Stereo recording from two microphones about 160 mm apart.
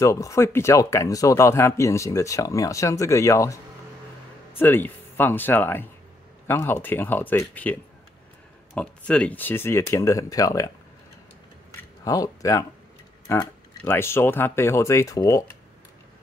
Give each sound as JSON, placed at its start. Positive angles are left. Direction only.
{"t": 0.0, "sound": "speech", "side_deg": 20}
{"t": 4.6, "sound": "speech", "side_deg": 10}
{"t": 12.0, "sound": "speech", "side_deg": 20}